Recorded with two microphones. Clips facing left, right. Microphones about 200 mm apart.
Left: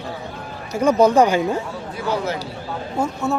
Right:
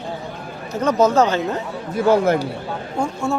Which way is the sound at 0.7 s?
10° left (ahead or behind).